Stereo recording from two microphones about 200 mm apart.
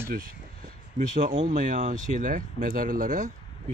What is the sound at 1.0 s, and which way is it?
Speech, 35° right (ahead or behind).